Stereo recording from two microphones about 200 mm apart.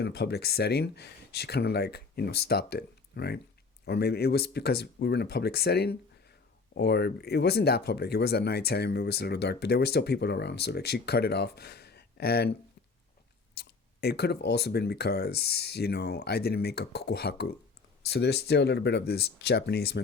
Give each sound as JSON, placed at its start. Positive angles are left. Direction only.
{"t": 0.0, "sound": "speech", "side_deg": 55}
{"t": 13.6, "sound": "speech", "side_deg": 55}